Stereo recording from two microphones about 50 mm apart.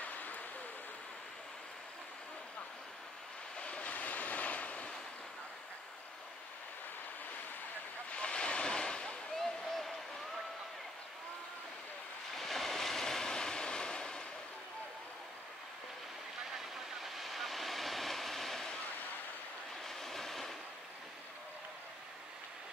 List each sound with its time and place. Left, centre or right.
0.0 s a sound: left
3.5 s waves: left
8.1 s vehicle: left
9.4 s a sound: centre
12.4 s waves: centre
16.5 s train: centre
19.8 s train: centre